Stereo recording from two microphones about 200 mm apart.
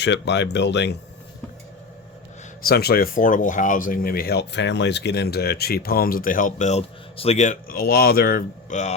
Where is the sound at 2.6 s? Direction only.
50° left (ahead or behind).